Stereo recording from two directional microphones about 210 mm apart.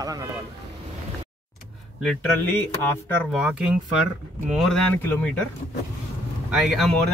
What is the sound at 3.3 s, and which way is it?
Speech, 5° right (ahead or behind).